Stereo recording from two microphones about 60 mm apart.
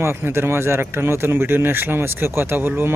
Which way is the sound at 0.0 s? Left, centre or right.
Right.